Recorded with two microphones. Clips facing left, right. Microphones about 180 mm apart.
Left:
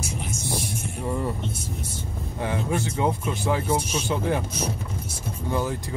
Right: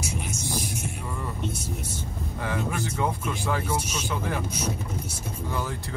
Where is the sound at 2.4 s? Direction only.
20° left (ahead or behind).